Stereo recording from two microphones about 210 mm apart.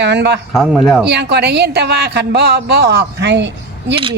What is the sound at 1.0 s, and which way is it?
A man's voice, 50° right (ahead or behind).